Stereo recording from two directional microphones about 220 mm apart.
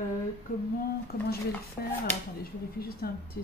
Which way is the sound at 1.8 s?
45° left (ahead or behind).